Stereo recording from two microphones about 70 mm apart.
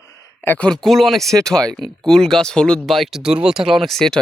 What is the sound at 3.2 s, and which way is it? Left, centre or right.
Speech, centre.